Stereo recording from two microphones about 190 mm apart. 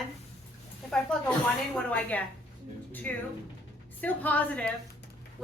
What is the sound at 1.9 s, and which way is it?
A woman's voice, 10° left (ahead or behind).